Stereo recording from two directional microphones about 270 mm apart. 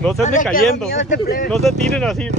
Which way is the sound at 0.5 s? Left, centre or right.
Left.